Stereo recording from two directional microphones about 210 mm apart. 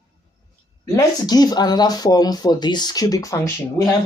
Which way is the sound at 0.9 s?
15° left (ahead or behind).